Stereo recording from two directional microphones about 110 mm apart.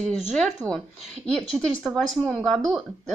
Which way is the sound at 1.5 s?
Centre (ahead or behind).